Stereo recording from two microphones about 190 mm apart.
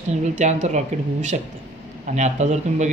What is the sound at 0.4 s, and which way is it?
A man's voice, 40° right (ahead or behind).